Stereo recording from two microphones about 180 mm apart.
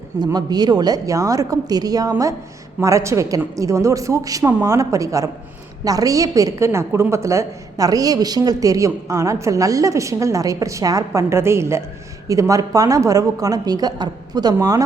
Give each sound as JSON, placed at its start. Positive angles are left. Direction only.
{"t": 0.2, "sound": "a woman's voice", "side_deg": -20}